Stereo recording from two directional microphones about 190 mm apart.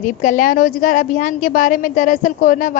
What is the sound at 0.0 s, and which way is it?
A woman's voice, 45° left (ahead or behind).